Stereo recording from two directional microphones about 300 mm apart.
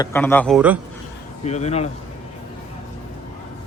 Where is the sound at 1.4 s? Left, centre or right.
Left.